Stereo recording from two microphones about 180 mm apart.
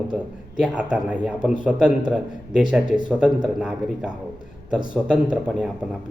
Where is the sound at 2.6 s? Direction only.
5° right (ahead or behind).